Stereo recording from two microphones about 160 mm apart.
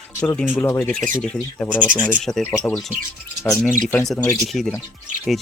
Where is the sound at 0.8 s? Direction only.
5° left (ahead or behind).